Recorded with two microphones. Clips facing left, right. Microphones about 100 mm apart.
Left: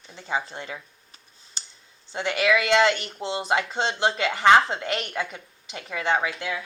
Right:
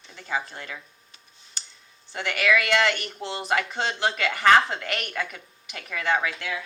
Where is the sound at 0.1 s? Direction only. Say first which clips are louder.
Left 1 dB; 25° left (ahead or behind).